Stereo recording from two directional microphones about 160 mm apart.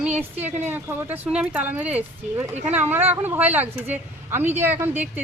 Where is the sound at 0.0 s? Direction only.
10° right (ahead or behind).